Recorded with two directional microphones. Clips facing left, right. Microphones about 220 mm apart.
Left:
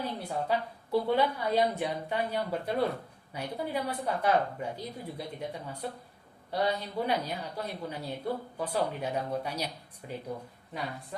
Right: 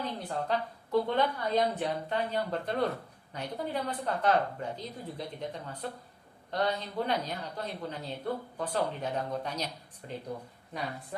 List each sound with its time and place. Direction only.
0.0 s speech: 10° left (ahead or behind)